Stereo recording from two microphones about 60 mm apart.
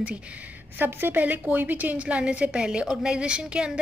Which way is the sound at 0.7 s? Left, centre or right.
Right.